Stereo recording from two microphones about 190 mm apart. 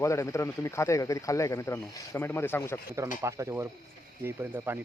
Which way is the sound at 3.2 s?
15° right (ahead or behind).